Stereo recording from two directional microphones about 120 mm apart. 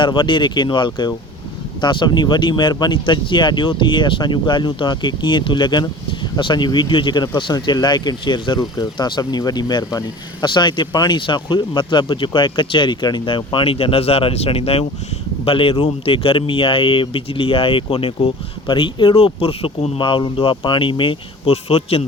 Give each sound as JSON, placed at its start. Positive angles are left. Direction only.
{"t": 0.0, "sound": "speech", "side_deg": 45}